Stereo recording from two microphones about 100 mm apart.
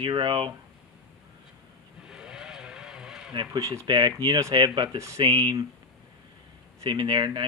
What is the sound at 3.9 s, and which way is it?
Speech, 50° right (ahead or behind).